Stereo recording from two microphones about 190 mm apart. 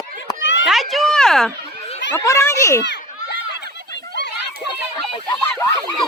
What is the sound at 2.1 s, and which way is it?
Speech, 15° left (ahead or behind).